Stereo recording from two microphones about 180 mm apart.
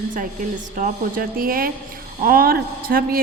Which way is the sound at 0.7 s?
50° right (ahead or behind).